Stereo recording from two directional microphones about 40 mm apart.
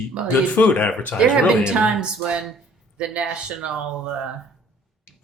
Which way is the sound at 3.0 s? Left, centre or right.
Right.